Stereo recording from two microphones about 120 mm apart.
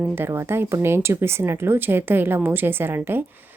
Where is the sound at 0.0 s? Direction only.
20° right (ahead or behind).